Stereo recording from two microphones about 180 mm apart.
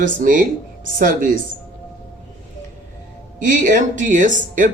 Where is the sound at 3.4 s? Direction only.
45° right (ahead or behind).